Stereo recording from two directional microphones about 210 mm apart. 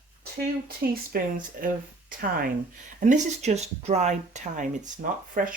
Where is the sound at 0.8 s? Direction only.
50° right (ahead or behind).